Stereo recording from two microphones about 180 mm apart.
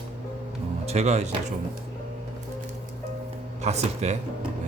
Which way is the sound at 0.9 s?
35° right (ahead or behind).